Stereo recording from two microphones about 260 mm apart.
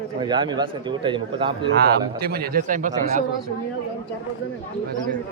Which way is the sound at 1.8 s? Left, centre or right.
Right.